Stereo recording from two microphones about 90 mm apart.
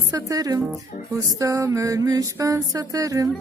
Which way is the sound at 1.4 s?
35° right (ahead or behind).